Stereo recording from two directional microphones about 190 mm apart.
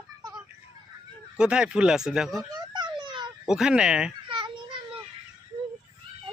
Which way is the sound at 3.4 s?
Centre (ahead or behind).